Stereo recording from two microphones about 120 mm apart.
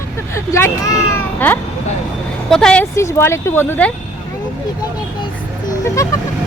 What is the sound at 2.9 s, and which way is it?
Speech, 25° left (ahead or behind).